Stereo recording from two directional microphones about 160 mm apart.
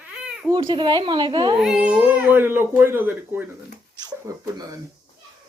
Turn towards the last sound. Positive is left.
turn(degrees=-20)  # may be behind; listen again after turning